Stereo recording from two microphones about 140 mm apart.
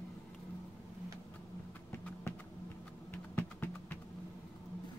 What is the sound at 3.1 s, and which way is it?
Music, 15° left (ahead or behind).